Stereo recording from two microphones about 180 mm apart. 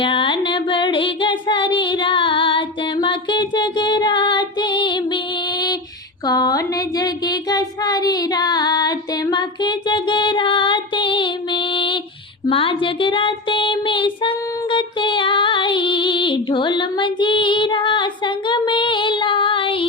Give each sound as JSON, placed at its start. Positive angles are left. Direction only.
{"t": 0.0, "sound": "child singing", "side_deg": 30}